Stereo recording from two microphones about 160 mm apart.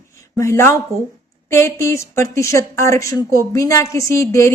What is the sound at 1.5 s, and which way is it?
A woman's voice, 15° left (ahead or behind).